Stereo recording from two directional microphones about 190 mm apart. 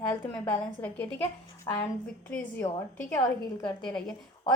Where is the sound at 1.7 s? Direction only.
15° left (ahead or behind).